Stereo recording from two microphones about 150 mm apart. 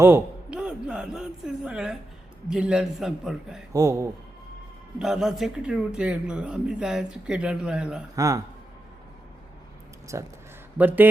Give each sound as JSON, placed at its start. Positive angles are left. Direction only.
{"t": 0.0, "sound": "a man's voice", "side_deg": -10}
{"t": 3.7, "sound": "speech", "side_deg": -20}
{"t": 4.9, "sound": "a man's voice", "side_deg": -5}
{"t": 8.1, "sound": "speech", "side_deg": -20}
{"t": 10.1, "sound": "speech", "side_deg": -20}